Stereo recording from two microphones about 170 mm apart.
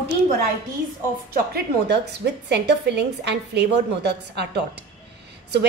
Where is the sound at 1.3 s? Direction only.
70° right (ahead or behind).